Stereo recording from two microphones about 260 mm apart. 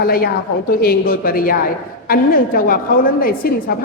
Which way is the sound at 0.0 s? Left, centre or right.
Left.